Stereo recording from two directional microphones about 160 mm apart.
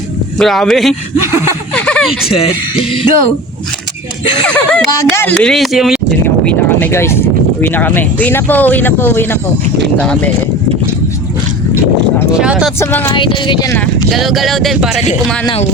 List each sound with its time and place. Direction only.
0.3 s speech: centre (ahead or behind)
1.7 s chuckle: 5° left (ahead or behind)
2.3 s music: 35° left (ahead or behind)
4.4 s speech: 5° left (ahead or behind)
6.2 s speech: 10° left (ahead or behind)
12.3 s speech: 5° right (ahead or behind)
12.8 s speech: 15° left (ahead or behind)
13.1 s speech: 30° left (ahead or behind)
14.1 s speech: centre (ahead or behind)